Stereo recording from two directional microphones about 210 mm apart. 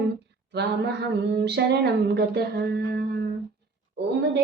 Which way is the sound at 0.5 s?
55° right (ahead or behind).